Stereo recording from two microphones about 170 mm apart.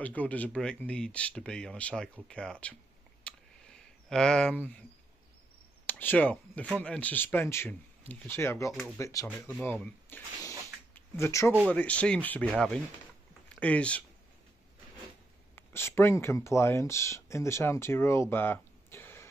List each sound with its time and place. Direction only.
0.0 s speech: 10° left (ahead or behind)
3.3 s a sound: 5° left (ahead or behind)
5.9 s speech: 10° left (ahead or behind)
15.5 s speech: 15° left (ahead or behind)